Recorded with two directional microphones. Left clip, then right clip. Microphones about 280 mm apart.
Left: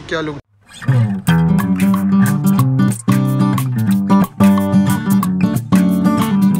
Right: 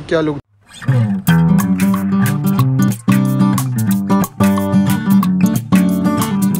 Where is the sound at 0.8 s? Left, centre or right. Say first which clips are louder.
Right 1 dB; centre.